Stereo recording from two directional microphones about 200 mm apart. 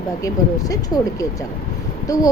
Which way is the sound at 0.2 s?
15° left (ahead or behind).